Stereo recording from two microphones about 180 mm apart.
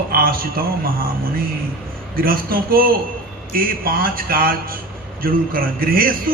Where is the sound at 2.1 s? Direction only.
55° right (ahead or behind).